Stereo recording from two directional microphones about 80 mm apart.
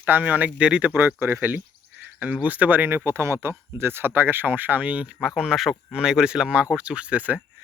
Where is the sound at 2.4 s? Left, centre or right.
Centre.